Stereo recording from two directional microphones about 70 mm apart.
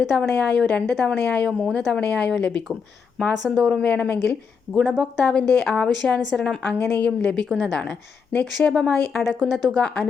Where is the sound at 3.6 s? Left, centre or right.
Centre.